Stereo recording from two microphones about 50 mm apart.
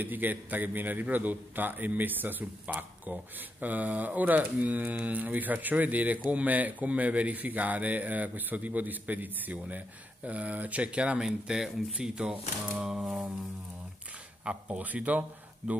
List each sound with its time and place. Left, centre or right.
0.0 s speech: right
11.1 s speech: centre
14.4 s speech: right